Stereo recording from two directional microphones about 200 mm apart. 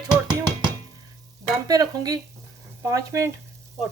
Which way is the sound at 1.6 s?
20° right (ahead or behind).